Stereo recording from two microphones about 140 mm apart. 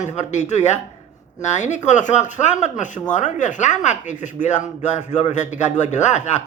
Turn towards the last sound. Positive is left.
turn(degrees=55)  # may be behind; listen again after turning